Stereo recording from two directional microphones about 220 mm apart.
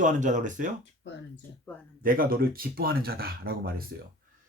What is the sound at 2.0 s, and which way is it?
Speech, 40° right (ahead or behind).